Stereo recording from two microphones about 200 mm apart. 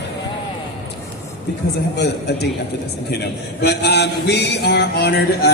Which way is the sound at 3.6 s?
55° left (ahead or behind).